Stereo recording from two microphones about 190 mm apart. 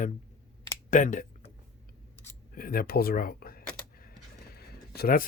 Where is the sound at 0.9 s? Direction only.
45° left (ahead or behind).